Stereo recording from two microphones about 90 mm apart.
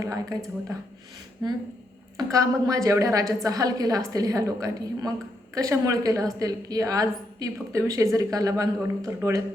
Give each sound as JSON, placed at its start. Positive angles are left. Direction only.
{"t": 0.0, "sound": "a woman's voice", "side_deg": -40}
{"t": 2.1, "sound": "a woman's voice", "side_deg": -40}